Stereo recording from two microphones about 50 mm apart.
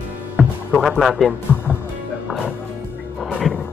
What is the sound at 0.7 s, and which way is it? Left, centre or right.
Speech, centre.